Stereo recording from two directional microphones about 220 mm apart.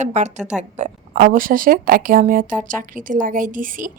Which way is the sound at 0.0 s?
30° right (ahead or behind).